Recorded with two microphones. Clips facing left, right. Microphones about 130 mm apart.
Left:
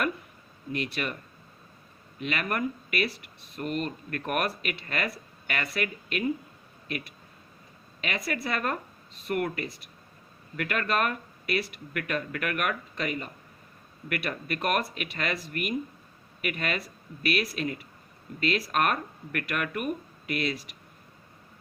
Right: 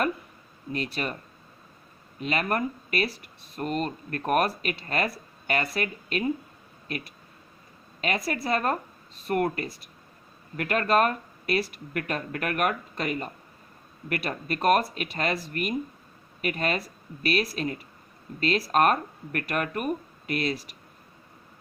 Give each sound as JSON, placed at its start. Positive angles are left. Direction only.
{"t": 0.7, "sound": "speech", "side_deg": -35}
{"t": 2.2, "sound": "speech", "side_deg": -35}
{"t": 8.2, "sound": "speech", "side_deg": -35}